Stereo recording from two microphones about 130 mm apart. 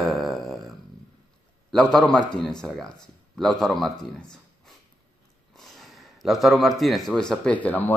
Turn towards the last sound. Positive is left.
turn(degrees=10)  # may be behind; listen again after turning